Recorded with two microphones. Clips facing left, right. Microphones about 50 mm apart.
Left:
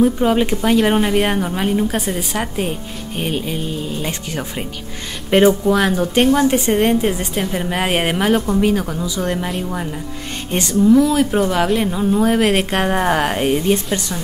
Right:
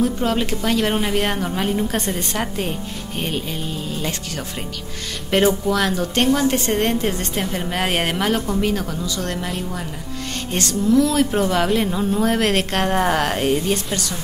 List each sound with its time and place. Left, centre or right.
0.0 s a woman's voice: centre
10.5 s a woman's voice: centre